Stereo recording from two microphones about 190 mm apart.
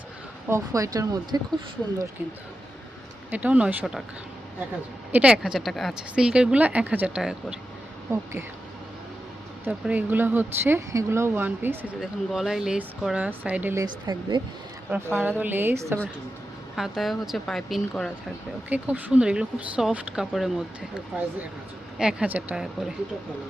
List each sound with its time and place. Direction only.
0.4 s speech: 15° right (ahead or behind)
3.2 s speech: 10° right (ahead or behind)
5.1 s a woman's voice: 5° right (ahead or behind)
8.1 s speech: 15° right (ahead or behind)
9.6 s speech: 10° right (ahead or behind)
13.8 s speech: 20° right (ahead or behind)
14.8 s speech: 10° right (ahead or behind)
16.7 s a woman's voice: centre (ahead or behind)
18.7 s speech: 10° right (ahead or behind)
21.9 s a woman's voice: 5° right (ahead or behind)